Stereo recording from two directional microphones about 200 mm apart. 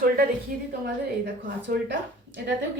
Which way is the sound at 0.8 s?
55° right (ahead or behind).